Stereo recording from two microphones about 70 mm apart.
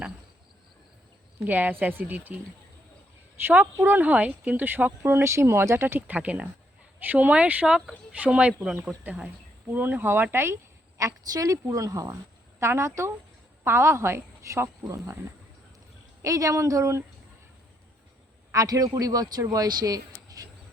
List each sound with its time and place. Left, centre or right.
1.5 s speech: right
3.4 s speech: right
9.7 s a woman's voice: right
10.3 s a sound: right
11.2 s speech: right
12.5 s a woman's voice: right
16.2 s speech: right
18.5 s speech: right